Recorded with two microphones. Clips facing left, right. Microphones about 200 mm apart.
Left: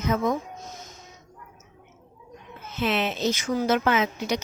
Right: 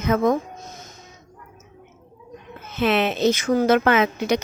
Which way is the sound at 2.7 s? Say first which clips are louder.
Right 5 dB; 65° right (ahead or behind).